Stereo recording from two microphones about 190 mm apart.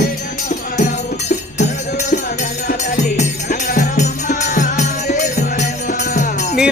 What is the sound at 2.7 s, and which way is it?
Music, 40° left (ahead or behind).